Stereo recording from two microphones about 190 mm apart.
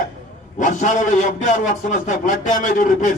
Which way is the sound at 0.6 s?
40° left (ahead or behind).